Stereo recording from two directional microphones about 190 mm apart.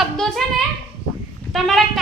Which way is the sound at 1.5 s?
Centre (ahead or behind).